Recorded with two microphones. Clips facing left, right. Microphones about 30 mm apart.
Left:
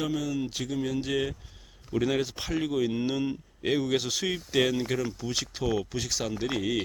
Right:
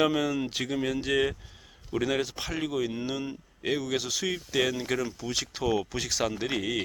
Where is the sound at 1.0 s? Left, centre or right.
Centre.